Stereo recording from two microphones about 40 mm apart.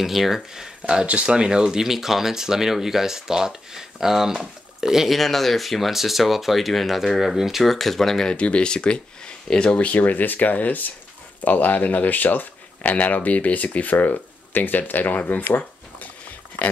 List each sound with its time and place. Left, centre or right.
0.0 s speech: centre
0.8 s speech: right
5.1 s speech: centre
7.6 s speech: centre
8.3 s speech: left
9.8 s speech: left